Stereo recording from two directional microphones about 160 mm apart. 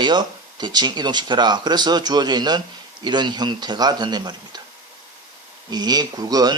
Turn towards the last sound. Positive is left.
turn(degrees=-25)  # may be behind; listen again after turning